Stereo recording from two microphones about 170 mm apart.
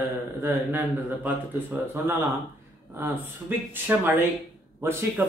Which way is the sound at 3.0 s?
10° right (ahead or behind).